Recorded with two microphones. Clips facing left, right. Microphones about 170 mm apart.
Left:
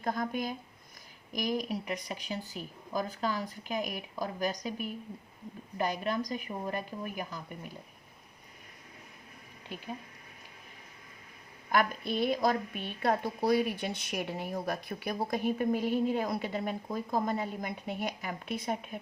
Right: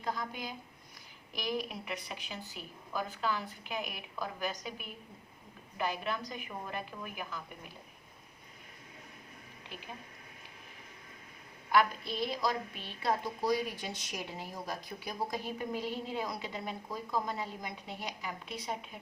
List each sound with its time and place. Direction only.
0.0 s a woman's voice: 50° left (ahead or behind)
11.7 s a woman's voice: 50° left (ahead or behind)